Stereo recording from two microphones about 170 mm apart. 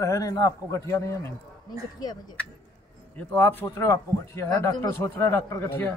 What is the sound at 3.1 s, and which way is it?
Speech, 10° left (ahead or behind).